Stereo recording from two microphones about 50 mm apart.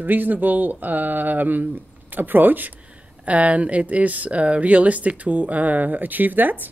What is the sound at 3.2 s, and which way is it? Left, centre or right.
Speech, right.